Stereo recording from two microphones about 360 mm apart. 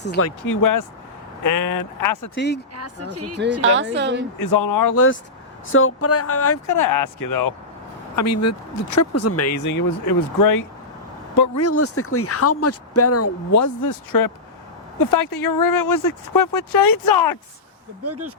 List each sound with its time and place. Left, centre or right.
0.0 s speech: left
0.5 s speech: left
2.3 s speech: left
2.7 s speech: right
4.4 s speech: left
5.7 s speech: left
6.7 s speech: left
8.1 s speech: left
10.1 s speech: left
11.3 s speech: left
18.0 s speech: right